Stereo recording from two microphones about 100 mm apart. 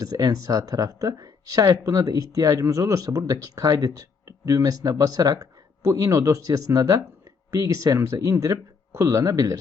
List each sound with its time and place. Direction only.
0.0 s speech: 40° right (ahead or behind)